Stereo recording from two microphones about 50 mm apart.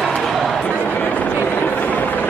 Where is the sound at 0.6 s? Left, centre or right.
Left.